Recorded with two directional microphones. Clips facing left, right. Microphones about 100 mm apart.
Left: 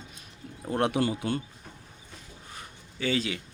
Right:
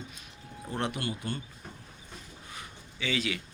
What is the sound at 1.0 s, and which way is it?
Speech, 90° left.